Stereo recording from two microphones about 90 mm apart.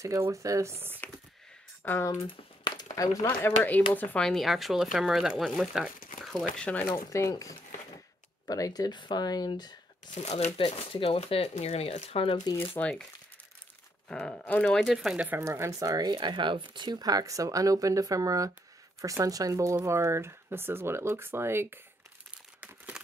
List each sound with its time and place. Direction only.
0.0 s speech: 35° right (ahead or behind)
1.8 s speech: 20° left (ahead or behind)
2.2 s a sound: 50° left (ahead or behind)
3.3 s speech: 25° left (ahead or behind)
4.2 s speech: centre (ahead or behind)
6.5 s speech: 10° left (ahead or behind)
7.1 s speech: 35° left (ahead or behind)
10.9 s speech: 90° left
12.8 s speech: 25° left (ahead or behind)
14.0 s speech: 15° left (ahead or behind)
14.8 s speech: 5° right (ahead or behind)
15.4 s speech: 30° right (ahead or behind)
16.1 s speech: 60° right (ahead or behind); by 21.7 s 25° right (ahead or behind)
22.6 s crumpling: 15° right (ahead or behind)